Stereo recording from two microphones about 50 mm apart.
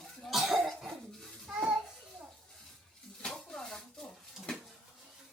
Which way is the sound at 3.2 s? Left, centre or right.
Centre.